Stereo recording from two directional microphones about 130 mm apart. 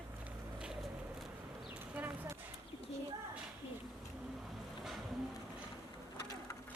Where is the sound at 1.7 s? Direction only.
10° right (ahead or behind).